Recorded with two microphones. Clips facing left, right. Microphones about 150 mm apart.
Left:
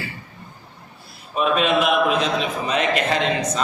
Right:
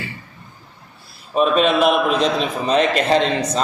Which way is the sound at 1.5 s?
35° right (ahead or behind).